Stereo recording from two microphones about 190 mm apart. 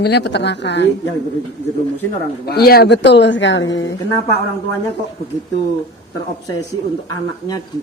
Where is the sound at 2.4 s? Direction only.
55° left (ahead or behind); by 3.6 s 70° left (ahead or behind).